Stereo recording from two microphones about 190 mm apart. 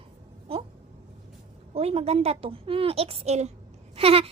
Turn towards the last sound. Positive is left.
turn(degrees=-30)  # may be behind; listen again after turning